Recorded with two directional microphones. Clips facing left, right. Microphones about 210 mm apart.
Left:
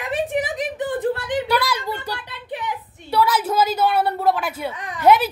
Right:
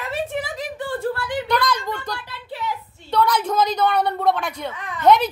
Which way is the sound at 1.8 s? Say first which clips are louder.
Left 1 dB; 20° left (ahead or behind).